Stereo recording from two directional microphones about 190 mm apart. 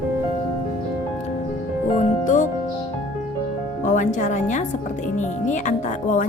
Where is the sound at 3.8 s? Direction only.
40° left (ahead or behind).